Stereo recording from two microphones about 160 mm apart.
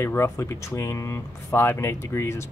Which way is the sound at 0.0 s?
15° left (ahead or behind).